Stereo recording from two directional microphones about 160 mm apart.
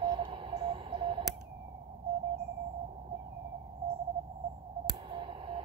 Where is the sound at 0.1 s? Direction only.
30° right (ahead or behind).